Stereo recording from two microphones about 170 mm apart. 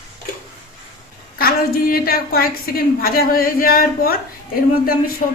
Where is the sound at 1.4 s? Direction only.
60° left (ahead or behind).